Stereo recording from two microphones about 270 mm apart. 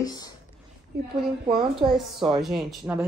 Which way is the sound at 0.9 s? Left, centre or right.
Right.